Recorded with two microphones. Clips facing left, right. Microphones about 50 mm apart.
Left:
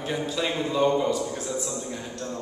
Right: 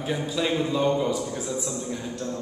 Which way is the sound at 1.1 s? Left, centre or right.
Centre.